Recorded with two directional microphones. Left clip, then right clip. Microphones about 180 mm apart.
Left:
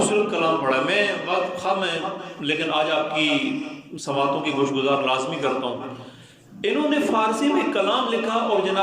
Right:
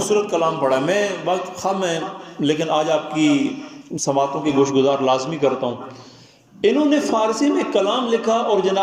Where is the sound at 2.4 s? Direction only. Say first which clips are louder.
Right 4 dB; 35° right (ahead or behind).